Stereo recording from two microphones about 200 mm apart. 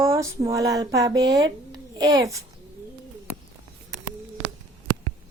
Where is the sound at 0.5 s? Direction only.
15° right (ahead or behind).